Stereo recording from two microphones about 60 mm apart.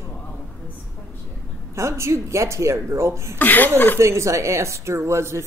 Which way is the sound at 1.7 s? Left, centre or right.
Right.